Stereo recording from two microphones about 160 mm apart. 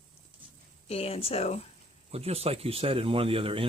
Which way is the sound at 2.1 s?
40° right (ahead or behind).